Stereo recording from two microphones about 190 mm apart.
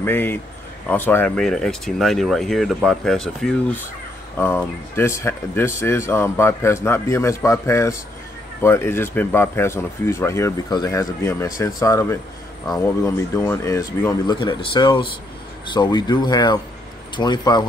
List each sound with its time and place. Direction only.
0.0 s speech: 10° left (ahead or behind)